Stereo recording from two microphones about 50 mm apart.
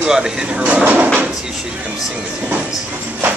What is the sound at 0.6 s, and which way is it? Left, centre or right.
Speech, right.